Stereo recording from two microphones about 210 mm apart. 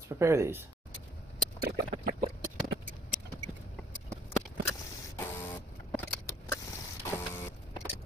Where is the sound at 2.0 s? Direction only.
45° right (ahead or behind).